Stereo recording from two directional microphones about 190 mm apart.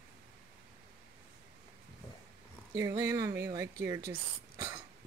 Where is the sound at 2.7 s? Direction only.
15° right (ahead or behind).